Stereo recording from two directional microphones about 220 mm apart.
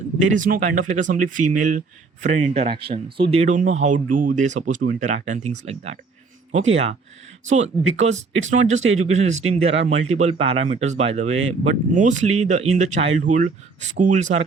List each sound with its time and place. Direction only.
0.3 s speech: 35° right (ahead or behind)